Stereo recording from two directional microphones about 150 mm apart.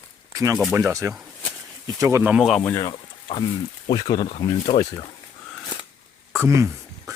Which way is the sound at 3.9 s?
30° left (ahead or behind).